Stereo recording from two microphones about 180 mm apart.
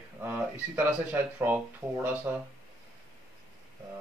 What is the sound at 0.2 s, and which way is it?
Speech, 10° right (ahead or behind).